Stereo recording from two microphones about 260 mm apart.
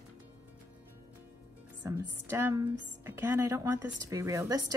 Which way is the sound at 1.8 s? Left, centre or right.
Centre.